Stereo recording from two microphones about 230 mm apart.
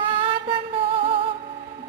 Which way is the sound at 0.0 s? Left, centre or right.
Right.